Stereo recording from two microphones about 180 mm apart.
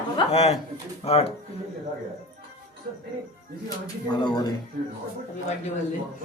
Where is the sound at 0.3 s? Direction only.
35° left (ahead or behind).